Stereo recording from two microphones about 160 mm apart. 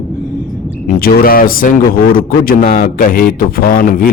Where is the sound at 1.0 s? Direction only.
65° left (ahead or behind).